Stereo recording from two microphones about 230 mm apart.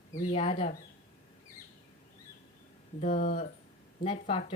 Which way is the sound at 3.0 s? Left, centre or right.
Left.